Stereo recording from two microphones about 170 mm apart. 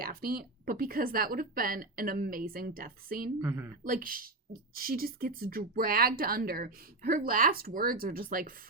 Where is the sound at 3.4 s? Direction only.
15° right (ahead or behind).